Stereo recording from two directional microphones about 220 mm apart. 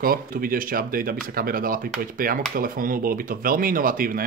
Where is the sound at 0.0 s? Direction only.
40° right (ahead or behind).